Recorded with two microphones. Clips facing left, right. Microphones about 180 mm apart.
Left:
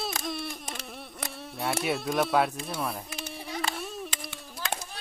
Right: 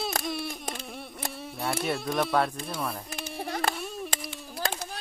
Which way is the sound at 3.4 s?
55° right (ahead or behind).